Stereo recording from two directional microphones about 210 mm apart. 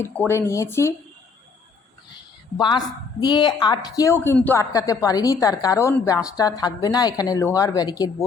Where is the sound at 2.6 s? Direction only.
20° left (ahead or behind).